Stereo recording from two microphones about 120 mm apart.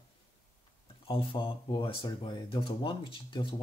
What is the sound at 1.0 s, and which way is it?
Speech, 45° left (ahead or behind).